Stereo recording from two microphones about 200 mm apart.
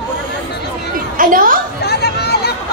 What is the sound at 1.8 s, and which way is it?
Chatter, 55° left (ahead or behind).